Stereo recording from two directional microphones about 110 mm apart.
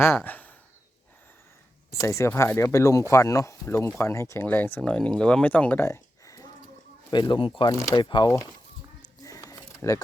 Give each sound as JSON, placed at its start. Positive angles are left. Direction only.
{"t": 0.0, "sound": "speech", "side_deg": 20}
{"t": 1.9, "sound": "speech", "side_deg": 25}
{"t": 5.8, "sound": "a sound", "side_deg": 30}
{"t": 7.1, "sound": "speech", "side_deg": 45}
{"t": 7.7, "sound": "speech", "side_deg": 30}
{"t": 9.0, "sound": "a sound", "side_deg": 30}
{"t": 9.8, "sound": "speech", "side_deg": 25}